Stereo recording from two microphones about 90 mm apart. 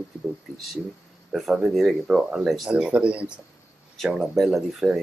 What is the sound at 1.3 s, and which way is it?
Speech, centre (ahead or behind).